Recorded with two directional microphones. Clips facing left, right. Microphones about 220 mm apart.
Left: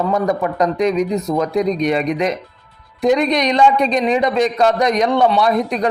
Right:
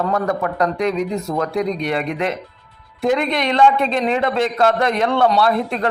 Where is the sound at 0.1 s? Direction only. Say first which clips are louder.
Left 2 dB; 20° left (ahead or behind).